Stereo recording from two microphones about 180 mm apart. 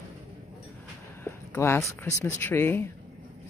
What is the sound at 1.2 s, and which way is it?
Speech, 15° left (ahead or behind).